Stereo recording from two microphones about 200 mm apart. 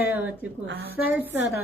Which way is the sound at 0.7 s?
50° right (ahead or behind).